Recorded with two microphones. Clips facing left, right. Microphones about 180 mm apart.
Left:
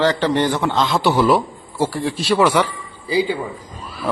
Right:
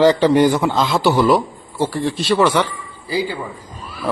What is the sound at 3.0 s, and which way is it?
Speech, 20° left (ahead or behind).